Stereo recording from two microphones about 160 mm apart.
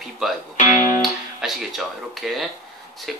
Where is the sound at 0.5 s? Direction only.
55° left (ahead or behind).